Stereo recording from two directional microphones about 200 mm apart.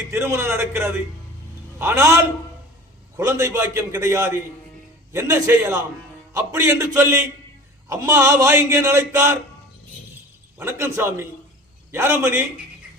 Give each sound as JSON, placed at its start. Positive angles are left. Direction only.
{"t": 0.1, "sound": "a man's voice", "side_deg": -10}
{"t": 10.6, "sound": "a man's voice", "side_deg": -10}